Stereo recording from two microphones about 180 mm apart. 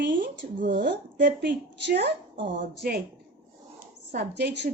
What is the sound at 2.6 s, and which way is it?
Speech, 55° right (ahead or behind).